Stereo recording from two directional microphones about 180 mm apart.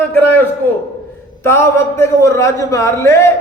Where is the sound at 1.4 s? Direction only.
15° left (ahead or behind).